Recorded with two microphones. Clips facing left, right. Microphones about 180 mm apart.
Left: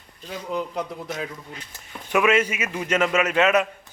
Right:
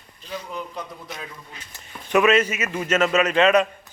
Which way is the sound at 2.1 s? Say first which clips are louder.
Right 2 dB; 10° left (ahead or behind).